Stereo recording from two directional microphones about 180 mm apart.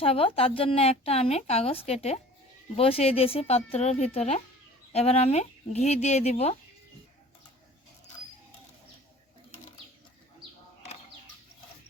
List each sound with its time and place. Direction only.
0.0 s speech: 30° left (ahead or behind)